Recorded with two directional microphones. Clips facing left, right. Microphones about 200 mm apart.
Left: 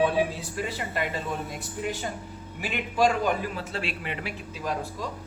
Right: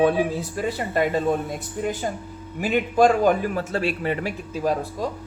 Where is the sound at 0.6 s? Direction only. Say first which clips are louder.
Right 7 dB; 45° right (ahead or behind).